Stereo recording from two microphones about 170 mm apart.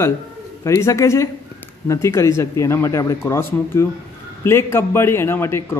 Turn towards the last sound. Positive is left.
turn(degrees=15)  # may be behind; listen again after turning